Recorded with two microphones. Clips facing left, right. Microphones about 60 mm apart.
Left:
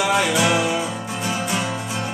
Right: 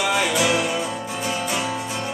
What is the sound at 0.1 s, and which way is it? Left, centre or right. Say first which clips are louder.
Music: left 1 dB; centre.